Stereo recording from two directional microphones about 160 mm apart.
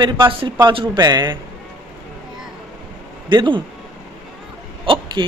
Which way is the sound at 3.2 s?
30° right (ahead or behind).